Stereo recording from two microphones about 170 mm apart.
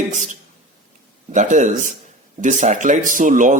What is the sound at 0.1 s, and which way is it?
Speech, 45° right (ahead or behind).